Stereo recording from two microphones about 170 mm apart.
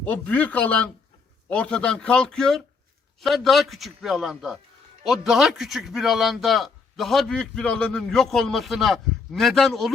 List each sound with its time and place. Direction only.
0.0 s a man's voice: 10° left (ahead or behind)